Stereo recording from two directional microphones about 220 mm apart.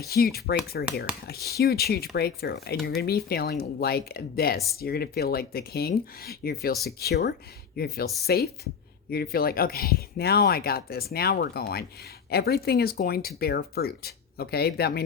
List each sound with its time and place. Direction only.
0.1 s speech: 45° left (ahead or behind)